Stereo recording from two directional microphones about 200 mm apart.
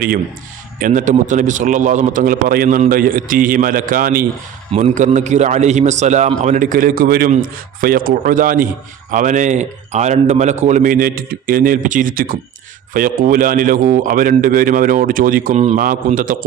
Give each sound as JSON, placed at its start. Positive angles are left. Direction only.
{"t": 0.8, "sound": "a man's voice", "side_deg": -40}